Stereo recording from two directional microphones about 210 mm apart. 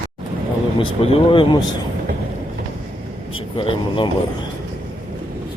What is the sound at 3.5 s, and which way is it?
Speech, 25° left (ahead or behind).